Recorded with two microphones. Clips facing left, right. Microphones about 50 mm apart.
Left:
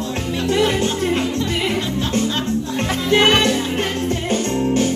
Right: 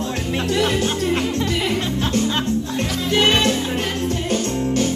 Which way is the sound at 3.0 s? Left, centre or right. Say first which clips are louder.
Left 3 dB; left.